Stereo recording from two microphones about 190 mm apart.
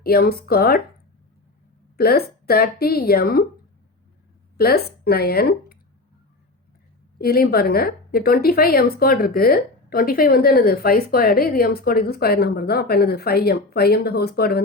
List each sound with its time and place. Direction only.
0.0 s a woman's voice: 55° left (ahead or behind)
2.0 s a woman's voice: 55° left (ahead or behind)
4.5 s a woman's voice: 55° left (ahead or behind)
7.2 s a woman's voice: 55° left (ahead or behind)